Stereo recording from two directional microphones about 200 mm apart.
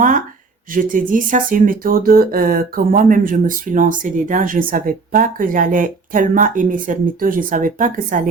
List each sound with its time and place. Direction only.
0.7 s speech: 40° right (ahead or behind)